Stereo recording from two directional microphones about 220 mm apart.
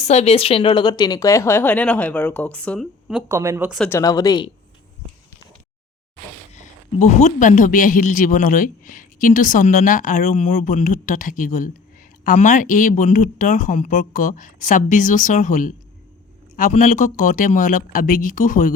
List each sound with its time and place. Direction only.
0.0 s speech: 30° left (ahead or behind); by 3.2 s centre (ahead or behind)
3.2 s speech: 15° right (ahead or behind)
3.8 s speech: 15° left (ahead or behind)
7.0 s speech: 30° left (ahead or behind)